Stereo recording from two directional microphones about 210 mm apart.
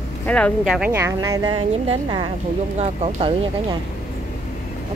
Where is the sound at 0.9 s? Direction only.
15° right (ahead or behind).